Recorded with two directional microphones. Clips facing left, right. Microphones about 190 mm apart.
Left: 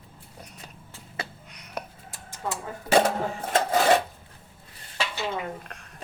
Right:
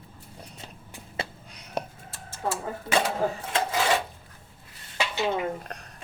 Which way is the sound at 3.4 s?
45° left (ahead or behind).